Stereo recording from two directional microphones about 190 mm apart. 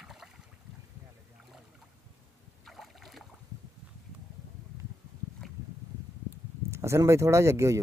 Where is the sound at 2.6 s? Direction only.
Centre (ahead or behind).